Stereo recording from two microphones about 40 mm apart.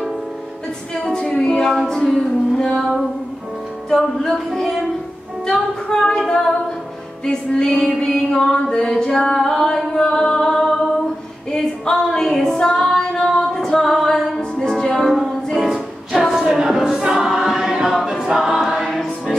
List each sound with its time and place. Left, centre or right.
1.0 s a capella: centre
2.0 s music: centre
4.5 s music: centre
5.5 s singing: centre
7.2 s music: centre
7.8 s singing: centre
11.5 s a sound: centre
12.3 s female singing: centre
14.6 s music: centre
15.5 s music: centre
17.0 s choir: centre